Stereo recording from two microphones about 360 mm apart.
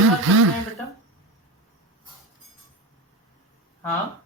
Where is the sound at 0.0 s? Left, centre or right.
Right.